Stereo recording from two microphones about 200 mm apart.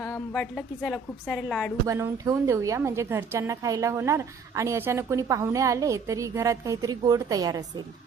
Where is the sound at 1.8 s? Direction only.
15° right (ahead or behind).